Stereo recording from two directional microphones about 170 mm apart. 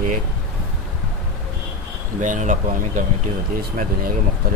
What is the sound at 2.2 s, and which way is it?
Speech, 45° right (ahead or behind).